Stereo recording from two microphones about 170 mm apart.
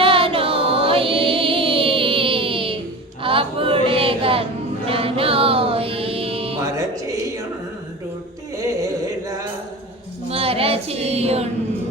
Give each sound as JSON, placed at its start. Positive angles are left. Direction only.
{"t": 0.0, "sound": "music", "side_deg": -30}
{"t": 3.2, "sound": "a sound", "side_deg": -30}
{"t": 4.9, "sound": "music", "side_deg": -35}
{"t": 6.6, "sound": "music", "side_deg": -20}
{"t": 8.5, "sound": "a sound", "side_deg": -20}
{"t": 10.2, "sound": "music", "side_deg": -35}